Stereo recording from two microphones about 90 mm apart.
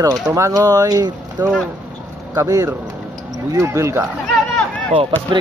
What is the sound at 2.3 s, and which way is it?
Speech, 45° right (ahead or behind).